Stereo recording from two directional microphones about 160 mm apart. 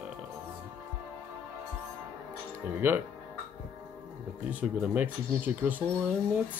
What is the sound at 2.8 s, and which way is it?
Speech, 10° right (ahead or behind).